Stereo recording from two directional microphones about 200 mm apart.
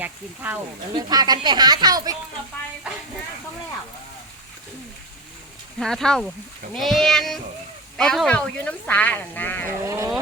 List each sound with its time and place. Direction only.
0.9 s speech: 20° right (ahead or behind)
5.8 s speech: centre (ahead or behind)
9.8 s speech: 15° right (ahead or behind)